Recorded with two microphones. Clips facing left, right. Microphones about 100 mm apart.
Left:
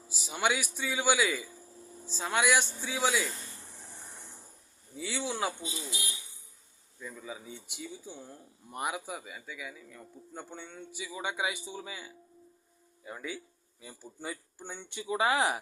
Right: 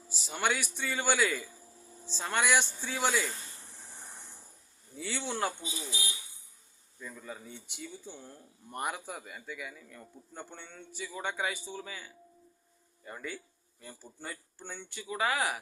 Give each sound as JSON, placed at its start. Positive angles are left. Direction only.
{"t": 0.1, "sound": "speech", "side_deg": 5}
{"t": 4.9, "sound": "speech", "side_deg": 0}
{"t": 7.0, "sound": "speech", "side_deg": 5}
{"t": 13.1, "sound": "speech", "side_deg": 5}